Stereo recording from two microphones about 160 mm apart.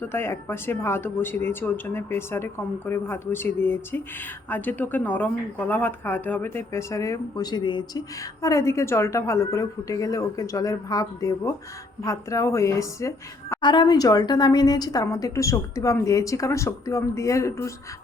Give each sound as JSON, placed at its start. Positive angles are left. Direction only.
{"t": 0.0, "sound": "speech", "side_deg": 15}